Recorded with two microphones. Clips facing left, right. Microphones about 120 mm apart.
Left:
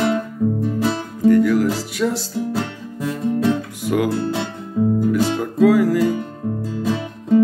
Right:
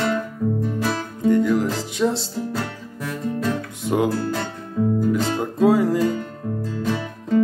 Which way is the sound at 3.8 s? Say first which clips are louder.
Right 2 dB; 25° right (ahead or behind).